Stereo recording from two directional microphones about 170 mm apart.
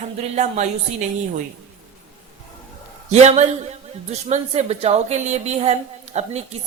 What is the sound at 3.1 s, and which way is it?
A woman's voice, 40° right (ahead or behind).